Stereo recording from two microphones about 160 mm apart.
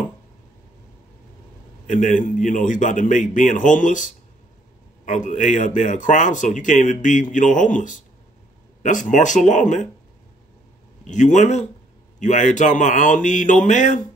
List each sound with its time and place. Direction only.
1.9 s speech: 55° left (ahead or behind)
9.1 s speech: 50° left (ahead or behind)
11.1 s speech: 50° left (ahead or behind)